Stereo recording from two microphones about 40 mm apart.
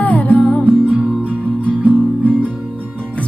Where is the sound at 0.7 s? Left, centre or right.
Right.